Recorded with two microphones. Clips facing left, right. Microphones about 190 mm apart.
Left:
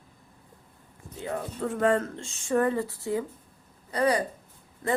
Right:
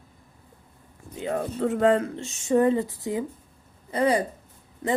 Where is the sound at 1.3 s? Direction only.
50° right (ahead or behind).